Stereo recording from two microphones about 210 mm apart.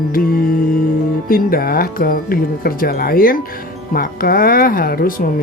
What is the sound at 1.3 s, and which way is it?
Speech, 45° left (ahead or behind).